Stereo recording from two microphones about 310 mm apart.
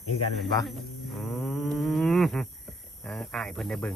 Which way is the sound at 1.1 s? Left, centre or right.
Centre.